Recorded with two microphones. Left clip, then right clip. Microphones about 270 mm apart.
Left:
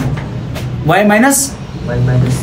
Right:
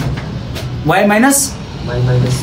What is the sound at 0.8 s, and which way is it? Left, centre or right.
Speech, centre.